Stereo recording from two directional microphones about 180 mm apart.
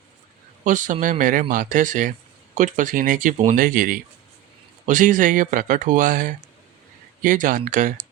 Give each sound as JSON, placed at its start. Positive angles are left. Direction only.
{"t": 0.6, "sound": "speech", "side_deg": -45}